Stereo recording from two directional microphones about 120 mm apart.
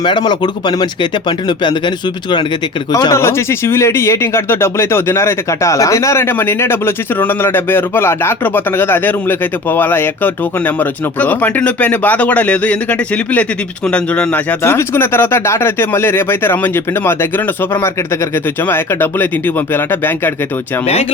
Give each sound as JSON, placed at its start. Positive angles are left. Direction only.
{"t": 0.0, "sound": "speech", "side_deg": 40}
{"t": 2.9, "sound": "speech", "side_deg": 25}
{"t": 14.6, "sound": "speech", "side_deg": 20}
{"t": 20.8, "sound": "speech", "side_deg": 60}